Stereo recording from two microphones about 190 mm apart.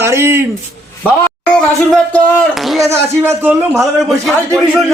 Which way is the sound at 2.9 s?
15° right (ahead or behind).